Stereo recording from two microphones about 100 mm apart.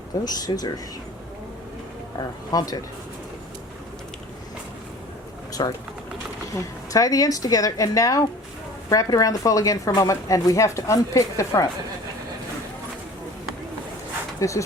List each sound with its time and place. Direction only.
0.3 s a woman's voice: 40° left (ahead or behind)
2.1 s a woman's voice: 40° left (ahead or behind)
5.6 s speech: 50° left (ahead or behind)
6.5 s a woman's voice: 35° left (ahead or behind)
14.3 s speech: 30° left (ahead or behind)